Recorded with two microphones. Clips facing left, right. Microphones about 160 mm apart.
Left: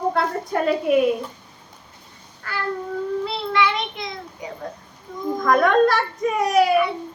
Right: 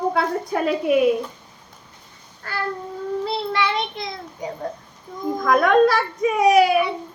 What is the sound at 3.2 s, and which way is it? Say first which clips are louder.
Child singing: right 1 dB; 35° right (ahead or behind).